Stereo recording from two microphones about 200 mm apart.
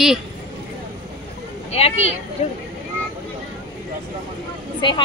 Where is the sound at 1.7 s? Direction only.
30° left (ahead or behind).